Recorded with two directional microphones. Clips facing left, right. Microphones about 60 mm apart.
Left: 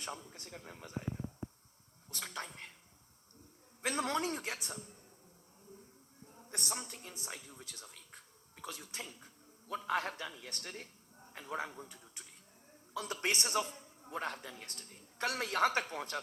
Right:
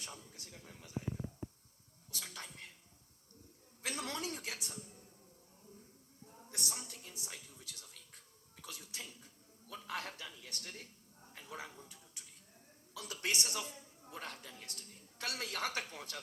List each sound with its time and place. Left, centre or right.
0.0 s speech: left
2.0 s a man's voice: left
3.8 s a man's voice: left
6.5 s a man's voice: left